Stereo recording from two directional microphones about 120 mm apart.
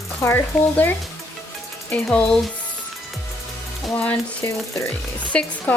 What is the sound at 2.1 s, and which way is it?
Speech, 5° left (ahead or behind).